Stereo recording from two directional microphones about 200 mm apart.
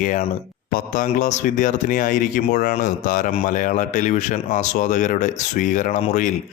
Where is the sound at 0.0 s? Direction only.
40° left (ahead or behind).